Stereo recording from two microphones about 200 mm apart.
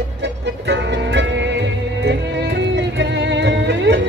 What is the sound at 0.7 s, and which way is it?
Music, 60° right (ahead or behind).